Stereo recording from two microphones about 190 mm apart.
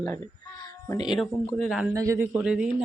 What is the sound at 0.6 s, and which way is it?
Speech, 20° left (ahead or behind).